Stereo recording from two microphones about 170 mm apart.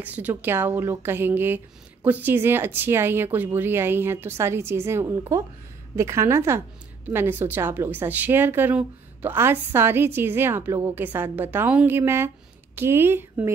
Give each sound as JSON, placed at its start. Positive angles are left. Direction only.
{"t": 0.0, "sound": "a woman's voice", "side_deg": -10}